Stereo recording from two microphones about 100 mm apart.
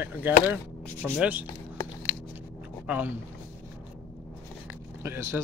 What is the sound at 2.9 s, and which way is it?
Speech, 15° right (ahead or behind).